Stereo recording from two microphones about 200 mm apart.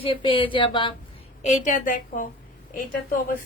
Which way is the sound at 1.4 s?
35° left (ahead or behind).